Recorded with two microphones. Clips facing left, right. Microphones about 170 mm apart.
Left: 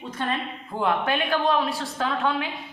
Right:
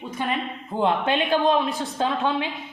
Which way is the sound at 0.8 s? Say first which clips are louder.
Right 2 dB; 25° right (ahead or behind).